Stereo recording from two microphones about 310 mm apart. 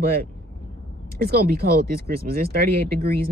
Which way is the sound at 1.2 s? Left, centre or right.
Right.